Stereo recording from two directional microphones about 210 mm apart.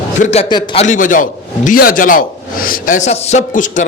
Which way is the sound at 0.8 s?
35° left (ahead or behind).